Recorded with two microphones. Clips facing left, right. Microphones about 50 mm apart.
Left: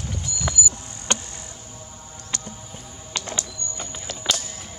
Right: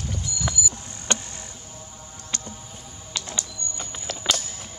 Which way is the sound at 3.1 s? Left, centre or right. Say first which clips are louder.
Left 3 dB; left.